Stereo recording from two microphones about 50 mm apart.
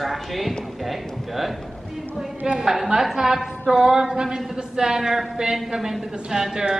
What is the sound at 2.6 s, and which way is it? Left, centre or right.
A woman's voice, centre.